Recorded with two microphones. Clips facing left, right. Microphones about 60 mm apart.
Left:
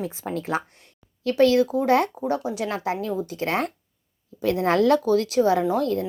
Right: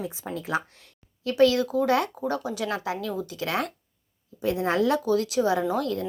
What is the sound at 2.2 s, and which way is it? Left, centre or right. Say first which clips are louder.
Speech: left 3 dB; left.